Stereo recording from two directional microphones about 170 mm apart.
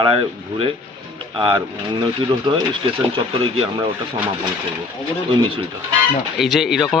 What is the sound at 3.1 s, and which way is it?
Speech, 30° right (ahead or behind).